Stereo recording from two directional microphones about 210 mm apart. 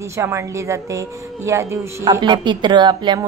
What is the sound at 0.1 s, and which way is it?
A woman's voice, 15° right (ahead or behind).